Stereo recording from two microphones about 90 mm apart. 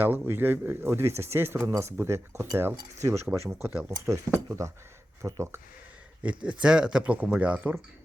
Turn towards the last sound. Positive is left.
turn(degrees=-15)  # may be behind; listen again after turning